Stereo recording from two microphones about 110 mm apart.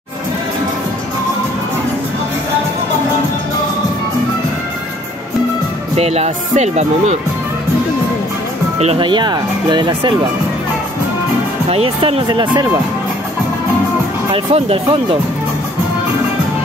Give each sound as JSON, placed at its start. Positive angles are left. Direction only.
{"t": 5.9, "sound": "speech", "side_deg": -70}
{"t": 8.7, "sound": "speech", "side_deg": -70}
{"t": 9.0, "sound": "speech", "side_deg": -45}
{"t": 11.7, "sound": "speech", "side_deg": -60}
{"t": 12.3, "sound": "speech", "side_deg": -45}
{"t": 14.3, "sound": "speech", "side_deg": -60}